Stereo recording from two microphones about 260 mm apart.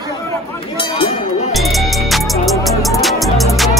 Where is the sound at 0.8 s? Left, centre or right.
Left.